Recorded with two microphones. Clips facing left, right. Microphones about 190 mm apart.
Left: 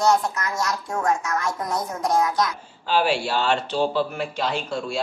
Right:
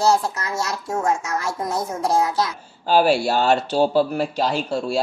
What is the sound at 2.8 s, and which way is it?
Speech, 40° right (ahead or behind).